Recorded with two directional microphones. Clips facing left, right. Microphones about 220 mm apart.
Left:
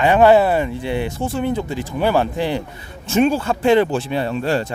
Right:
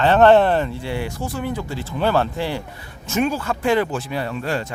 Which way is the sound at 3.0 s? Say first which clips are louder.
Left 5 dB; 30° left (ahead or behind).